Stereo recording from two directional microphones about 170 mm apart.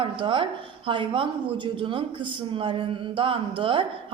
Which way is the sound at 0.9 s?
30° right (ahead or behind).